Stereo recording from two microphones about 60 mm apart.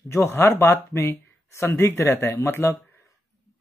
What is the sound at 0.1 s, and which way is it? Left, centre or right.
Speech, left.